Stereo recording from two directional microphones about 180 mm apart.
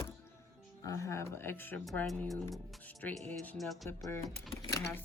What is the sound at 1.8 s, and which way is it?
Speech, centre (ahead or behind).